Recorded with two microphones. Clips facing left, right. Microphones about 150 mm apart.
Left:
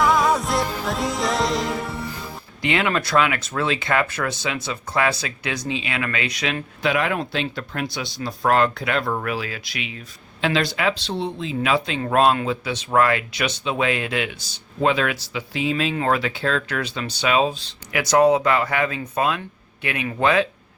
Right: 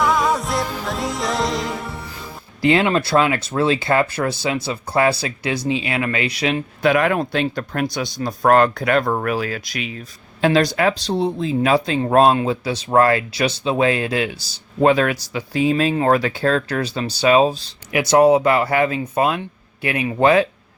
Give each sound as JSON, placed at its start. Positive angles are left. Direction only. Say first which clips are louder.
{"t": 0.0, "sound": "music", "louder": "even", "side_deg": 0}
{"t": 2.6, "sound": "speech", "louder": "right 6 dB", "side_deg": -35}
{"t": 6.8, "sound": "speech", "louder": "right 5 dB", "side_deg": -50}
{"t": 17.9, "sound": "speech", "louder": "right 3 dB", "side_deg": -25}